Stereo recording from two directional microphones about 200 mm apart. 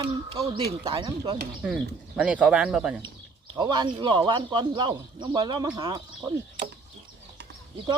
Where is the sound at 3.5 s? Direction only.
20° right (ahead or behind).